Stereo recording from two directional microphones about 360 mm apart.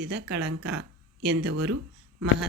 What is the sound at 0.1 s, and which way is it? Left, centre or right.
Speech, right.